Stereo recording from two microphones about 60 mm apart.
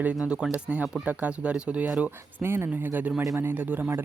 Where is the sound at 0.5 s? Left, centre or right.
Right.